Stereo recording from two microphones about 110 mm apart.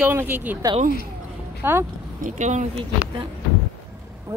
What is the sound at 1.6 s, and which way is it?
Speech, 20° right (ahead or behind).